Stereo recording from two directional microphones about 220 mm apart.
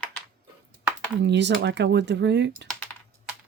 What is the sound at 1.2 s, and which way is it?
A woman's voice, 50° right (ahead or behind).